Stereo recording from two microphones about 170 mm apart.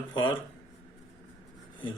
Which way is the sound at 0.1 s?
25° left (ahead or behind).